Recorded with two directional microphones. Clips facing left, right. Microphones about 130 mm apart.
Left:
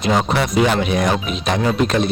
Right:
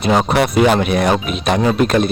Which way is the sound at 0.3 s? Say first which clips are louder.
Right 4 dB; 60° right (ahead or behind).